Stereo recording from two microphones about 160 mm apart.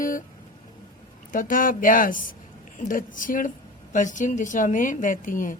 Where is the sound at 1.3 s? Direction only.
55° left (ahead or behind).